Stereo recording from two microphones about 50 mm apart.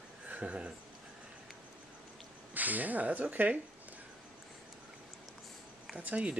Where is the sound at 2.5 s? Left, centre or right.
Right.